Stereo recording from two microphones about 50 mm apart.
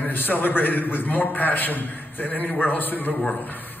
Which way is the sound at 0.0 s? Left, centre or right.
Left.